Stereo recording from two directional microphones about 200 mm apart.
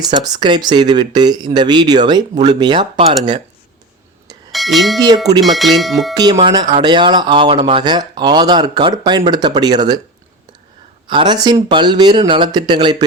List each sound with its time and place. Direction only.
0.1 s speech: 20° right (ahead or behind)
4.5 s speech: centre (ahead or behind)
4.9 s speech: 20° right (ahead or behind)
5.4 s speech: centre (ahead or behind)
6.3 s speech: 25° right (ahead or behind)
11.1 s speech: 25° right (ahead or behind)